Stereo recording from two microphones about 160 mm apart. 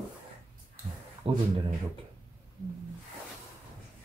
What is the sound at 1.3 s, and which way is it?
Speech, 35° right (ahead or behind).